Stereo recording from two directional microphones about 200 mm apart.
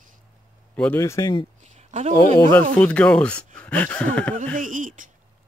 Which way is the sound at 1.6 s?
35° right (ahead or behind).